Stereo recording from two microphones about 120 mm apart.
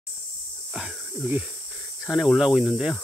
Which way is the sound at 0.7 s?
5° right (ahead or behind).